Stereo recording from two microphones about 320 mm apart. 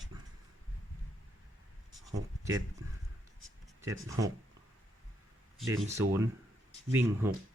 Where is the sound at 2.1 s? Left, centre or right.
Centre.